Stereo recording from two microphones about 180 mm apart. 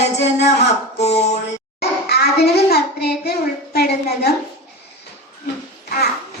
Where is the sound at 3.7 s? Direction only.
60° left (ahead or behind).